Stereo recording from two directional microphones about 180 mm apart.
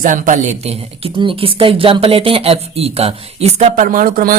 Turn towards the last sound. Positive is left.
turn(degrees=-55)  # may be behind; listen again after turning